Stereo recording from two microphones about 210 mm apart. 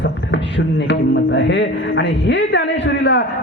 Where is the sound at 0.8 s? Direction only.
60° left (ahead or behind).